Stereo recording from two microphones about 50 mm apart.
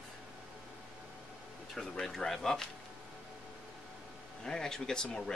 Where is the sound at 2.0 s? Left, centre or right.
Centre.